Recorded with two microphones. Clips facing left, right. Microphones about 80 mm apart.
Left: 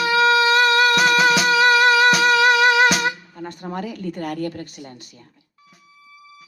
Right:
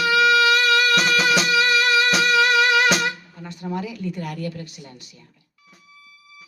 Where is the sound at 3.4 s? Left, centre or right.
Left.